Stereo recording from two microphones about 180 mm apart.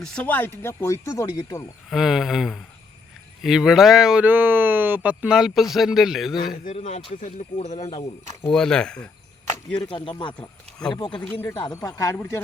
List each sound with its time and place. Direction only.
0.0 s speech: 10° left (ahead or behind)
1.9 s speech: centre (ahead or behind)
6.4 s a man's voice: 55° left (ahead or behind)
6.7 s speech: 35° left (ahead or behind)
8.4 s speech: 5° left (ahead or behind)
9.8 s speech: 25° left (ahead or behind)
11.2 s speech: 10° left (ahead or behind)
11.5 s speech: 25° left (ahead or behind)